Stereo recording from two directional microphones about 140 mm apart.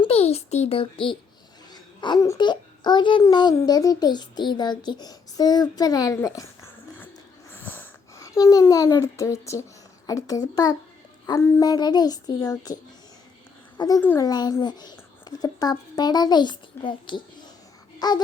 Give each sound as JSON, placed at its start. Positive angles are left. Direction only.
{"t": 0.0, "sound": "a child's voice", "side_deg": 45}
{"t": 7.5, "sound": "a child's voice", "side_deg": 15}